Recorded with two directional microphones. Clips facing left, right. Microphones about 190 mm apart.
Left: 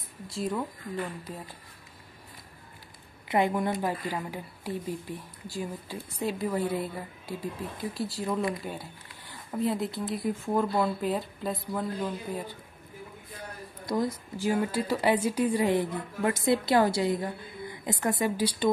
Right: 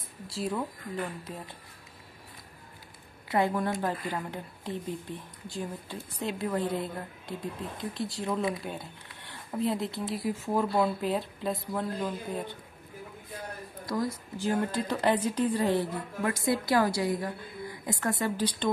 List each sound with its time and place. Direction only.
0.3 s a woman's voice: centre (ahead or behind)
3.3 s a woman's voice: 15° left (ahead or behind); by 12.5 s centre (ahead or behind)
13.8 s a woman's voice: 20° left (ahead or behind)
14.4 s a woman's voice: 10° left (ahead or behind)